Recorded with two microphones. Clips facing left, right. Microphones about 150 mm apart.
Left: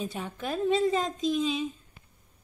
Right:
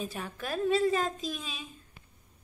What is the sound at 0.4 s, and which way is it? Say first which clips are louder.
A woman's voice: left 1 dB; 20° left (ahead or behind).